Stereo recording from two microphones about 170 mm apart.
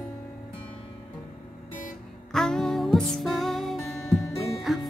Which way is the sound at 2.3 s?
5° left (ahead or behind).